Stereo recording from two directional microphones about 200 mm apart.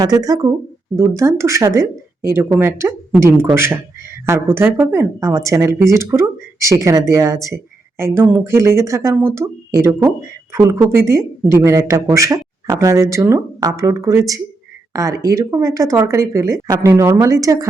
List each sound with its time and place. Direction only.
0.0 s speech: 20° right (ahead or behind)